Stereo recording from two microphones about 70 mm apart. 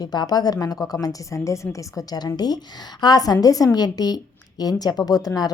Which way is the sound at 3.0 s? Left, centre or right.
Left.